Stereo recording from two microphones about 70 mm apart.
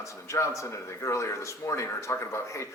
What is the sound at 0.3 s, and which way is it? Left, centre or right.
A man's voice, left.